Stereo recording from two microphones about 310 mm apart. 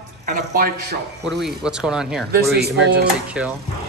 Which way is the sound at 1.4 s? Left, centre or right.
Centre.